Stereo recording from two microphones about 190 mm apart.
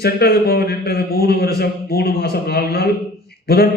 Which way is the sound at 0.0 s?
55° left (ahead or behind).